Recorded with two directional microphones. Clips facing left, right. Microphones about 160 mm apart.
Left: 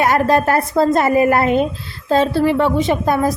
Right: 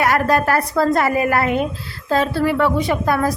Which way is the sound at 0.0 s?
25° left (ahead or behind).